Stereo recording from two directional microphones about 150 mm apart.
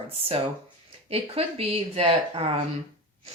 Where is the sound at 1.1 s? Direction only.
40° right (ahead or behind).